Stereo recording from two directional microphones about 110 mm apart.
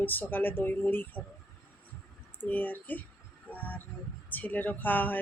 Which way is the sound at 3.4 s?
15° left (ahead or behind).